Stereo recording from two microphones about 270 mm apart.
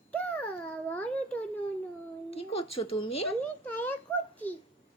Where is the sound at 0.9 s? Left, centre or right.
Centre.